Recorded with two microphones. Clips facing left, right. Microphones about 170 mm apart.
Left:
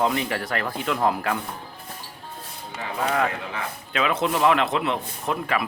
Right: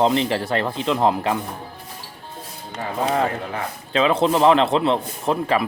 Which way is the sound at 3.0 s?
30° right (ahead or behind).